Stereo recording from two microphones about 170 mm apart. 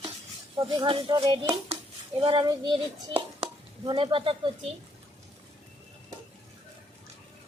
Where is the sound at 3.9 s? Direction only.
30° right (ahead or behind).